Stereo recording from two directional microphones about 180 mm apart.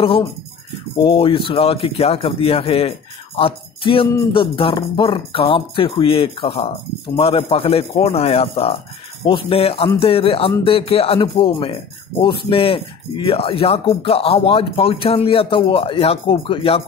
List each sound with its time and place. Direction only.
1.0 s speech: 30° left (ahead or behind)